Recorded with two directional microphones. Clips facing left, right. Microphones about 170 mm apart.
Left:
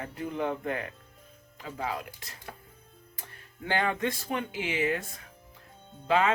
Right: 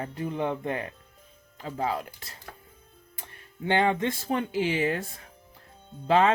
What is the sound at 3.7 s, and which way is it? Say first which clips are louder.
Speech: right 4 dB; 25° right (ahead or behind).